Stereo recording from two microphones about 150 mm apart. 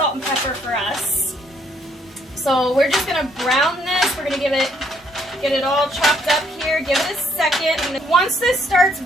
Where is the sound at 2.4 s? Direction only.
Centre (ahead or behind).